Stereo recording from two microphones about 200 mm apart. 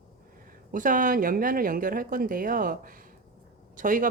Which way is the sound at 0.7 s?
40° right (ahead or behind).